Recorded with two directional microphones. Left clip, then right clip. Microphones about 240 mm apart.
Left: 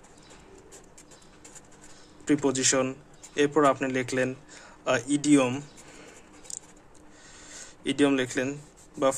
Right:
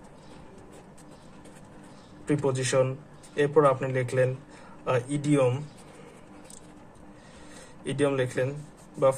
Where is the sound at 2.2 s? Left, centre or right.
Left.